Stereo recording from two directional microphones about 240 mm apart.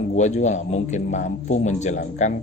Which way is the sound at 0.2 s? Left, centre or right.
Left.